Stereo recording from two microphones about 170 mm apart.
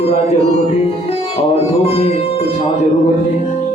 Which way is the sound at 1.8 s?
35° left (ahead or behind).